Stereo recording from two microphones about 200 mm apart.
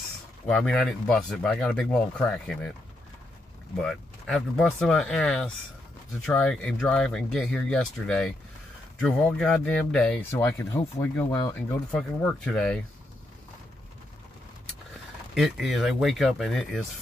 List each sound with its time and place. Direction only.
0.5 s speech: 5° left (ahead or behind)
3.8 s speech: centre (ahead or behind)
15.3 s speech: centre (ahead or behind)